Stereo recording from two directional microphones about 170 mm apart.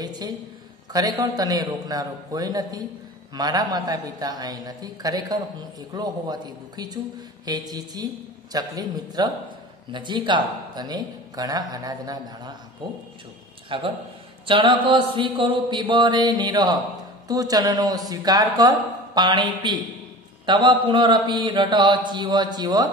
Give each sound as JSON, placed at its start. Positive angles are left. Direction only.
{"t": 0.0, "sound": "a man's voice", "side_deg": -25}
{"t": 13.7, "sound": "a man's voice", "side_deg": -30}